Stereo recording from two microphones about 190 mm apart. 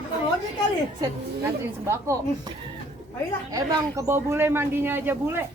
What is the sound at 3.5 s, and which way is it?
A man's voice, 15° right (ahead or behind).